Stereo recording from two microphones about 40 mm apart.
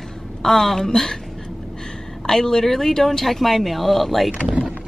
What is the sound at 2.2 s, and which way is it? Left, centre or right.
Speech, centre.